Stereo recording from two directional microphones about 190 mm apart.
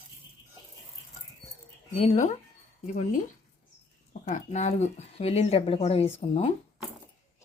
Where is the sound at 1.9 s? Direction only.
35° left (ahead or behind).